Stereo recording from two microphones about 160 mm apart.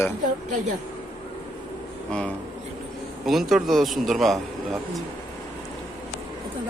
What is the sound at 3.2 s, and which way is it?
Speech, centre (ahead or behind).